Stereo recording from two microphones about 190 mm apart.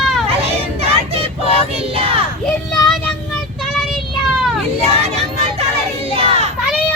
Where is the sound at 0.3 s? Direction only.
30° right (ahead or behind).